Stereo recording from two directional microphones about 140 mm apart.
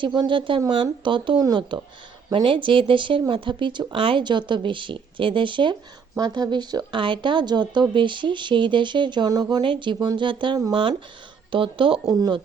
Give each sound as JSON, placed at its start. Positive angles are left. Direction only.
{"t": 0.0, "sound": "speech", "side_deg": -35}